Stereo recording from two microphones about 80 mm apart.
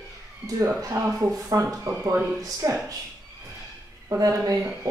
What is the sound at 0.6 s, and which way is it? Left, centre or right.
Speech, right.